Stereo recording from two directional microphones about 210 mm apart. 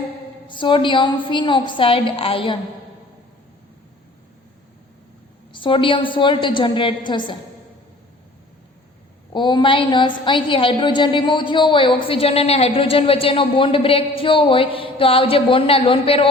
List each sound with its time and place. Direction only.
0.4 s a woman's voice: 25° left (ahead or behind)
5.5 s a woman's voice: 25° left (ahead or behind)
9.3 s a woman's voice: 20° left (ahead or behind)